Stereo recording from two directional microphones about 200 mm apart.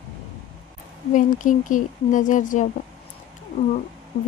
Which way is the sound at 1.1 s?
40° left (ahead or behind).